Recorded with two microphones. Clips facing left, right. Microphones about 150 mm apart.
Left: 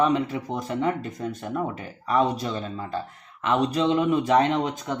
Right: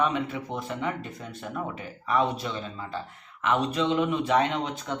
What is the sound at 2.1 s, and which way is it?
Speech, 40° left (ahead or behind).